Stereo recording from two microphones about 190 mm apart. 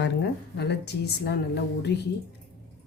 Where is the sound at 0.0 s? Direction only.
65° left (ahead or behind).